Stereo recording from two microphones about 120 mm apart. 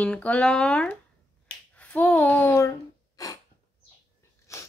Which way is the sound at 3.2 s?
30° left (ahead or behind).